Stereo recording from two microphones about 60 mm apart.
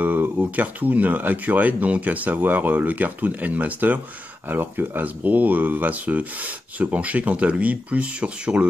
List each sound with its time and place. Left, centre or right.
0.4 s speech: right